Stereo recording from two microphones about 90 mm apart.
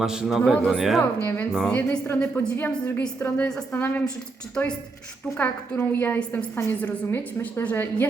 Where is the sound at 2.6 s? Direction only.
15° left (ahead or behind).